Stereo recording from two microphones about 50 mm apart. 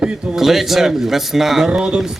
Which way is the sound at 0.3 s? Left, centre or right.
Centre.